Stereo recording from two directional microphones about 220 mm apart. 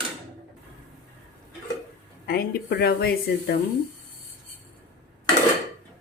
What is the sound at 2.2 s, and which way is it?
Speech, 45° left (ahead or behind).